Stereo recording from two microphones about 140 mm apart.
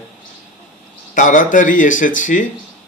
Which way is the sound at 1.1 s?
70° left (ahead or behind).